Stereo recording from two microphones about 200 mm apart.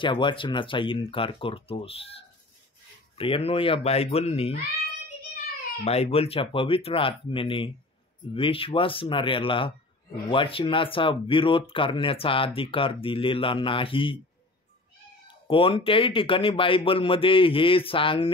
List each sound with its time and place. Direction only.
0.0 s speech: 25° left (ahead or behind)
5.9 s speech: 30° left (ahead or behind)
15.2 s speech: 25° left (ahead or behind)